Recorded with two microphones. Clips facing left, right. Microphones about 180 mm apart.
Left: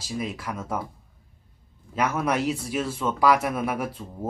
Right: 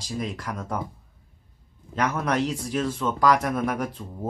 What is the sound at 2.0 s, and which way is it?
Speech, 5° left (ahead or behind).